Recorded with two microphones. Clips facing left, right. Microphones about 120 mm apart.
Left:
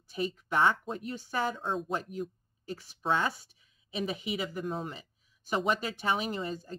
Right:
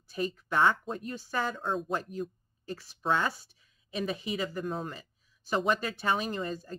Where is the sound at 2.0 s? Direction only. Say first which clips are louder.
Right 1 dB; 15° left (ahead or behind).